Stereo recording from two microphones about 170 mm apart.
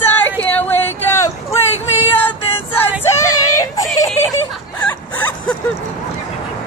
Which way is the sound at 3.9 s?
20° left (ahead or behind).